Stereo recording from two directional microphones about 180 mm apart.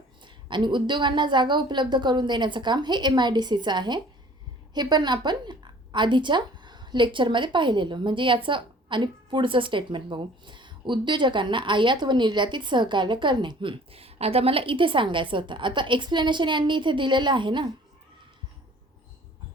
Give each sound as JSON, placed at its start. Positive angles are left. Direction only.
{"t": 0.3, "sound": "a woman's voice", "side_deg": -25}